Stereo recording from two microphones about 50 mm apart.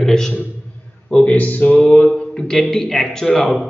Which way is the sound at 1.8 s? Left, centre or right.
Left.